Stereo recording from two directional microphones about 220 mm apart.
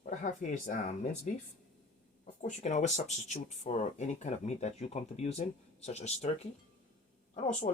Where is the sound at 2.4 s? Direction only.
35° left (ahead or behind).